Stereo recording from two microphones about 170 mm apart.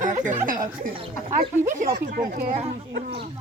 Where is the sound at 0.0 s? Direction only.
50° right (ahead or behind).